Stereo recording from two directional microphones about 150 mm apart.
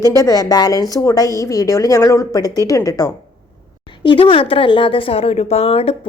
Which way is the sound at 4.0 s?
35° left (ahead or behind).